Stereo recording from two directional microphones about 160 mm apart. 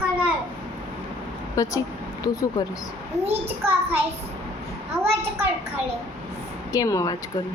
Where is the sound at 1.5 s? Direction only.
20° left (ahead or behind).